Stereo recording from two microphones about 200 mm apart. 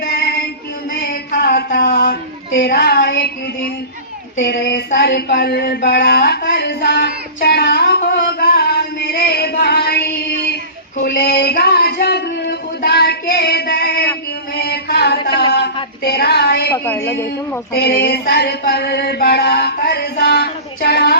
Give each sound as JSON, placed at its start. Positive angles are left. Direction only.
{"t": 0.0, "sound": "music", "side_deg": 55}
{"t": 1.3, "sound": "a sound", "side_deg": 50}
{"t": 2.6, "sound": "mantra", "side_deg": 55}
{"t": 4.4, "sound": "child singing", "side_deg": 60}
{"t": 4.9, "sound": "a sound", "side_deg": 55}
{"t": 10.5, "sound": "female singing", "side_deg": 45}
{"t": 14.5, "sound": "a sound", "side_deg": 50}
{"t": 16.7, "sound": "a man's voice", "side_deg": 10}
{"t": 17.7, "sound": "mantra", "side_deg": 55}